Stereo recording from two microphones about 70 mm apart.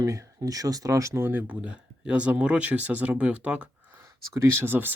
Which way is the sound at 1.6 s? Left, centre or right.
Centre.